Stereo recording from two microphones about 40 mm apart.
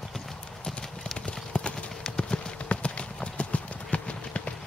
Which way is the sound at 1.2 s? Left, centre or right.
Left.